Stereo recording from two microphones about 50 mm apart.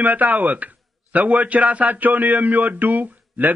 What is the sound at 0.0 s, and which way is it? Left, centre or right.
A man's voice, right.